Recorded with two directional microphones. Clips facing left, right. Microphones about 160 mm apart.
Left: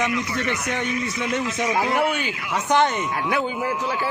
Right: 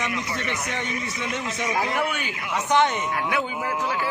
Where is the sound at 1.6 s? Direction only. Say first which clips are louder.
Left 3 dB; 25° left (ahead or behind).